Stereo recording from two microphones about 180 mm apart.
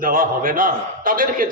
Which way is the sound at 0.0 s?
50° right (ahead or behind).